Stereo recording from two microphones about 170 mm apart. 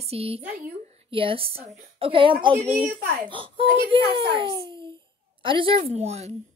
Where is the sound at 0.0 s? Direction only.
35° right (ahead or behind).